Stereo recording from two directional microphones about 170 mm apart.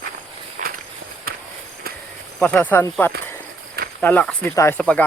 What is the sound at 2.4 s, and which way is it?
Speech, 10° left (ahead or behind).